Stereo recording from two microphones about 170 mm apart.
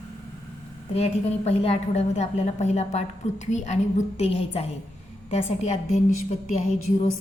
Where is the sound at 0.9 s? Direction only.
40° left (ahead or behind).